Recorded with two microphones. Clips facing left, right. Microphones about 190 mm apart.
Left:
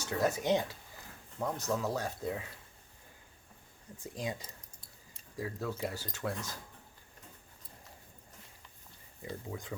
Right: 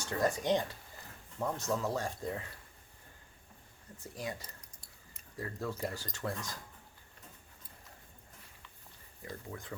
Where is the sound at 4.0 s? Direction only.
15° left (ahead or behind).